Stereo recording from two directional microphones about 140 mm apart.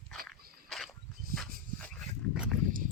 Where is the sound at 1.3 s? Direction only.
90° right.